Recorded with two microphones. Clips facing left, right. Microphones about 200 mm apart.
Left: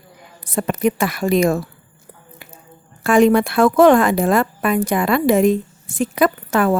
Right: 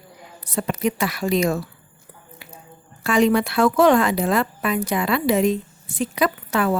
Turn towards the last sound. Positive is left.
turn(degrees=50)  # may be behind; listen again after turning